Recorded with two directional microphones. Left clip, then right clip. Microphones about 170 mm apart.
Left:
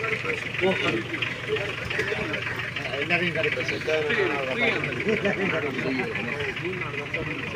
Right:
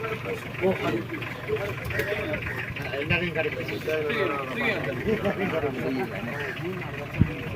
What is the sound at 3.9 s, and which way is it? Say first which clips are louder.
Speech: left 2 dB; 60° right (ahead or behind).